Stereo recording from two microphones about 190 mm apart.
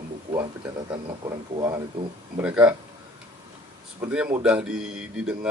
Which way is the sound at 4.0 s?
5° right (ahead or behind).